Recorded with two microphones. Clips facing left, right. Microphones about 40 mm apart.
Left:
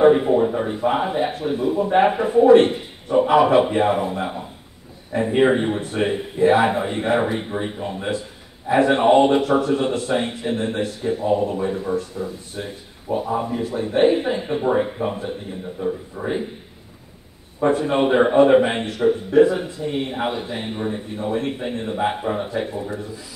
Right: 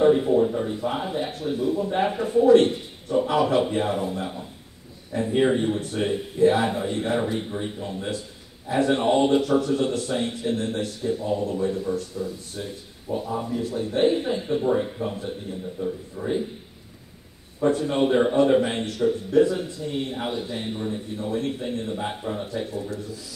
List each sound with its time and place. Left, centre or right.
0.0 s a sound: left
0.7 s a man's voice: left
15.8 s speech: centre
17.6 s speech: left